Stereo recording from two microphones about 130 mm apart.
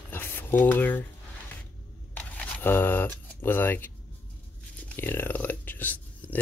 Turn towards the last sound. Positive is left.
turn(degrees=15)  # may be behind; listen again after turning